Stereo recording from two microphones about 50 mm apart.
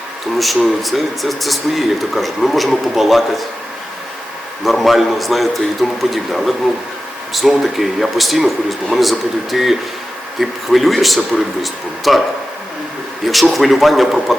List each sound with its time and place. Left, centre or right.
0.3 s speech: centre
4.6 s speech: centre
13.2 s speech: centre